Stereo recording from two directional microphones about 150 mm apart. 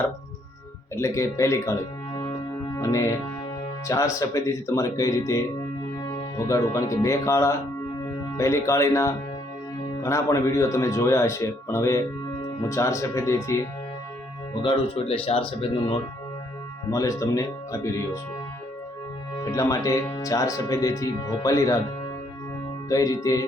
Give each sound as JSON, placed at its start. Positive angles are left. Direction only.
{"t": 0.9, "sound": "speech", "side_deg": 20}
{"t": 14.6, "sound": "speech", "side_deg": 40}
{"t": 16.9, "sound": "speech", "side_deg": 20}
{"t": 19.5, "sound": "speech", "side_deg": 20}
{"t": 22.9, "sound": "speech", "side_deg": 25}